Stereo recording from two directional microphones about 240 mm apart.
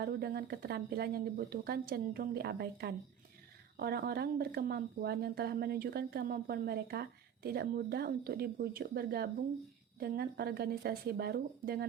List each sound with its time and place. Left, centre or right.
0.0 s speech: right